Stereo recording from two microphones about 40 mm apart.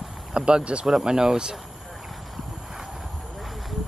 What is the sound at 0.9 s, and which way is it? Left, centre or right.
Speech, centre.